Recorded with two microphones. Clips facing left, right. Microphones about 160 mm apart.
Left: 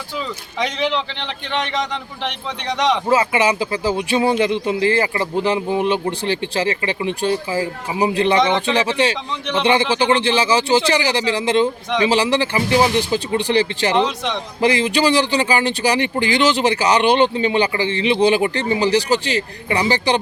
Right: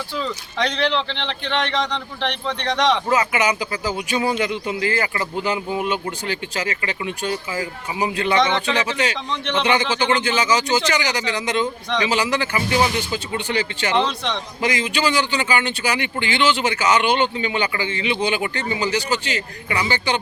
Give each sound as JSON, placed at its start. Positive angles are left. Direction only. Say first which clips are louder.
{"t": 0.6, "sound": "a man's voice", "louder": "even", "side_deg": 10}
{"t": 3.1, "sound": "a man's voice", "louder": "left 3 dB", "side_deg": 30}